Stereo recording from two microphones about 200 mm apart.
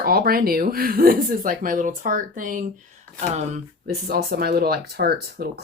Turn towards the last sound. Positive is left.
turn(degrees=-55)  # may be behind; listen again after turning